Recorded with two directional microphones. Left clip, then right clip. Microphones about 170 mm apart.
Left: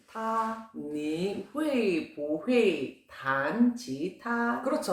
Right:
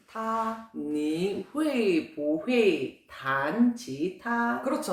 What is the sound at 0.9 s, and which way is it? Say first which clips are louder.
Speech: right 3 dB; 25° right (ahead or behind).